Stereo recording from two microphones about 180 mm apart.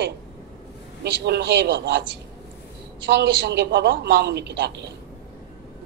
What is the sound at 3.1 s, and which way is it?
Speech, 70° right (ahead or behind).